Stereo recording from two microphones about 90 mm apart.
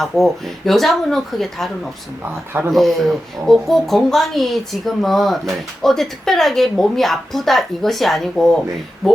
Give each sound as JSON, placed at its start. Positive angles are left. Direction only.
{"t": 0.0, "sound": "speech", "side_deg": 0}
{"t": 2.5, "sound": "speech", "side_deg": -25}
{"t": 2.7, "sound": "speech", "side_deg": 0}